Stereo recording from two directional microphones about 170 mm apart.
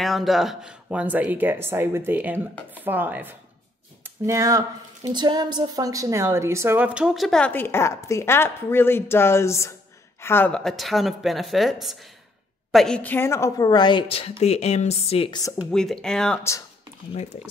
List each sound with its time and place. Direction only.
0.0 s a woman's voice: centre (ahead or behind); by 15.2 s 35° left (ahead or behind)
15.7 s a woman's voice: 5° left (ahead or behind)
17.1 s speech: 40° left (ahead or behind)